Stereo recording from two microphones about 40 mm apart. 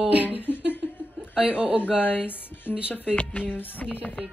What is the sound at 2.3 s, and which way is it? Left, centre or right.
Speech, left.